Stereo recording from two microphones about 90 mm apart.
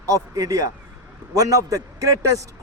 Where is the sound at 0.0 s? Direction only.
40° right (ahead or behind).